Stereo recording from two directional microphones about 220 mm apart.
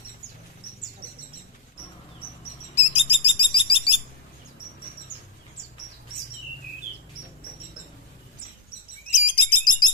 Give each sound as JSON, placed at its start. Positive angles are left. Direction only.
{"t": 2.7, "sound": "bird", "side_deg": 25}
{"t": 9.1, "sound": "bird", "side_deg": 30}